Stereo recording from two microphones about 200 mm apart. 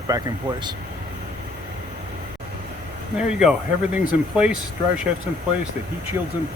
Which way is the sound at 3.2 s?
5° right (ahead or behind).